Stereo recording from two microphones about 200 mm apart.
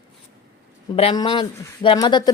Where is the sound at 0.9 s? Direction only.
25° left (ahead or behind).